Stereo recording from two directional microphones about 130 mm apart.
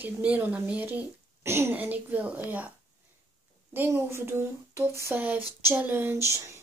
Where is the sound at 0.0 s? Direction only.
15° right (ahead or behind).